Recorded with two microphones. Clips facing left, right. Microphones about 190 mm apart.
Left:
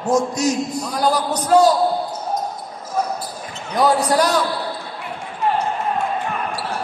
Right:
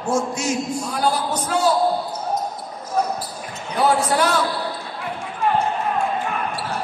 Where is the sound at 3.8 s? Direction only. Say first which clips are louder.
Left 2 dB; 35° left (ahead or behind).